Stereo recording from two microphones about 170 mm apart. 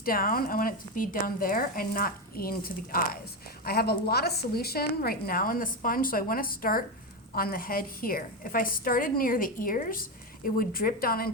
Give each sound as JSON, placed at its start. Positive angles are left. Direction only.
{"t": 0.0, "sound": "a woman's voice", "side_deg": 60}